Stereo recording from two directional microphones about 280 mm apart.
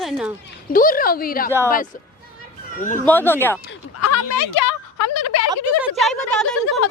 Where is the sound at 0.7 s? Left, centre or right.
Left.